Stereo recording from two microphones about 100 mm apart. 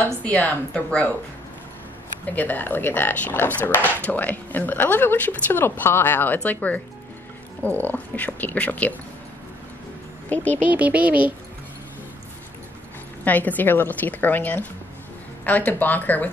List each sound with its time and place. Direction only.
0.0 s speech: 15° left (ahead or behind)
2.3 s speech: 20° left (ahead or behind)
10.3 s speech: 15° left (ahead or behind)
10.6 s speech: 15° right (ahead or behind)
13.2 s speech: 15° left (ahead or behind)